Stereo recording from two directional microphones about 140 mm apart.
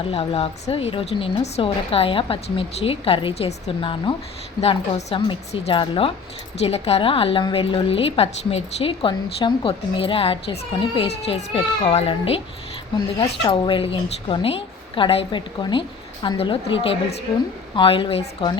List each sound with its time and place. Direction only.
0.1 s a woman's voice: 45° left (ahead or behind)
6.6 s a woman's voice: 50° left (ahead or behind)